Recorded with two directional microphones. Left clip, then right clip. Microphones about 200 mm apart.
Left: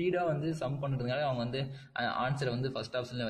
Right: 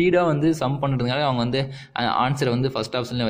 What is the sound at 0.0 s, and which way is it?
A man's voice, 45° right (ahead or behind).